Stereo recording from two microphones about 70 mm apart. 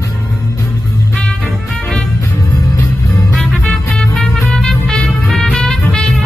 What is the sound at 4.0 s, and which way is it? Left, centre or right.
Music, centre.